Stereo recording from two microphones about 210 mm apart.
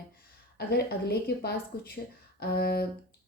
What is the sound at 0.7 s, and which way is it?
A woman's voice, 50° left (ahead or behind).